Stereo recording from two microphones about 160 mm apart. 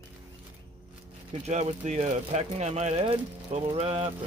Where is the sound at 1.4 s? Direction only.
45° right (ahead or behind).